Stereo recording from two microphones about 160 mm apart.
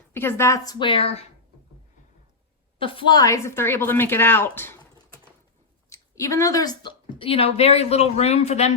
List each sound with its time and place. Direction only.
0.1 s a woman's voice: 15° left (ahead or behind); by 1.2 s 35° left (ahead or behind)
2.7 s a woman's voice: 35° left (ahead or behind); by 4.8 s 15° left (ahead or behind)
5.9 s a woman's voice: 20° left (ahead or behind); by 8.7 s 45° left (ahead or behind)